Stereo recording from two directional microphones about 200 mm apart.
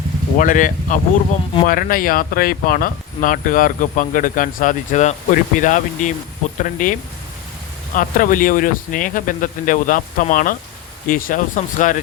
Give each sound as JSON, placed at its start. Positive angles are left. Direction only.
{"t": 0.3, "sound": "speech", "side_deg": 40}
{"t": 7.9, "sound": "speech", "side_deg": 45}